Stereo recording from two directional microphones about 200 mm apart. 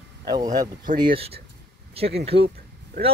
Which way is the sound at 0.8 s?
45° right (ahead or behind).